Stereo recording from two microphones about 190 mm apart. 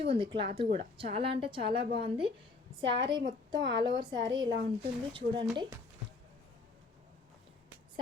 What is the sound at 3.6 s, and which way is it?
Speech, 55° right (ahead or behind).